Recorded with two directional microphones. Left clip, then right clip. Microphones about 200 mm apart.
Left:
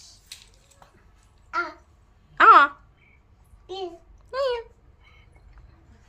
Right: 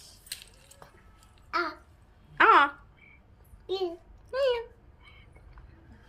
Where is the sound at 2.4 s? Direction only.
15° left (ahead or behind).